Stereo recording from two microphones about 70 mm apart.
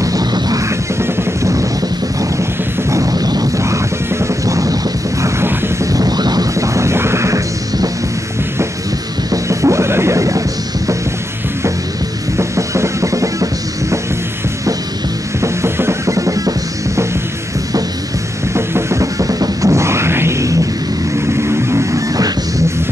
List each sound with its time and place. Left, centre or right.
0.0 s music: right
0.7 s music: right
2.9 s a sound: right
3.5 s music: right
5.2 s a sound: right
6.5 s music: right
9.3 s music: right
12.4 s music: right
15.4 s music: right
18.5 s music: right